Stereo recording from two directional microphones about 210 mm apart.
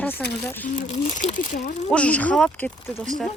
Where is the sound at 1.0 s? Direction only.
35° left (ahead or behind).